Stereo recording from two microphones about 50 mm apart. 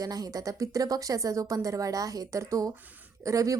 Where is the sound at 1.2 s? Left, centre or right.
Right.